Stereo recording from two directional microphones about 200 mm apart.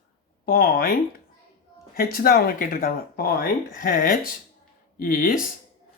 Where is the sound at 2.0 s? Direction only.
50° left (ahead or behind).